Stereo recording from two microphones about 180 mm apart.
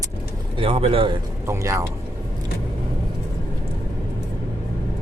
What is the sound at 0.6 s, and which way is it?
Speech, 30° right (ahead or behind).